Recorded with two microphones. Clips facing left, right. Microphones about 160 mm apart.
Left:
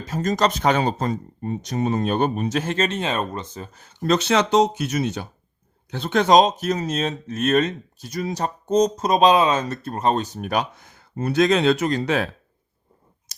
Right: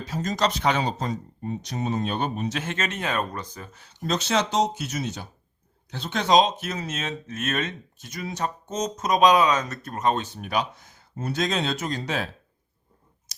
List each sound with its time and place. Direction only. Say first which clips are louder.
0.0 s speech: left 4 dB; 50° left (ahead or behind)
2.6 s speech: left 7 dB; 35° left (ahead or behind)
4.0 s speech: left 5 dB; 65° left (ahead or behind)